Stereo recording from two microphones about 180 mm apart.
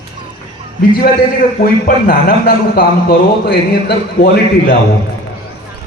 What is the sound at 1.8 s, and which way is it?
A man's voice, 55° left (ahead or behind).